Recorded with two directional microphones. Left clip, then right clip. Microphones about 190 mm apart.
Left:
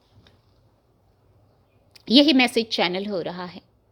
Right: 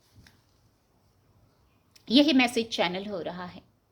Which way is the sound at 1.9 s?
40° left (ahead or behind).